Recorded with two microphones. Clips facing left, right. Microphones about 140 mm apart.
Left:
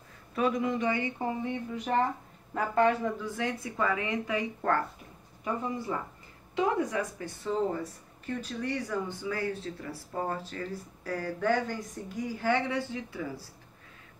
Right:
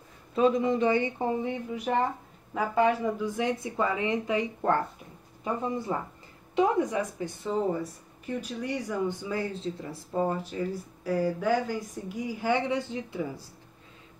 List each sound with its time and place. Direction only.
0.3 s speech: 25° right (ahead or behind)
1.9 s speech: centre (ahead or behind)
3.2 s speech: 20° right (ahead or behind)